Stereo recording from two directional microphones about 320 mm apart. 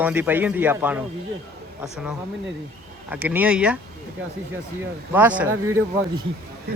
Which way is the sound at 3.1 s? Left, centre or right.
Centre.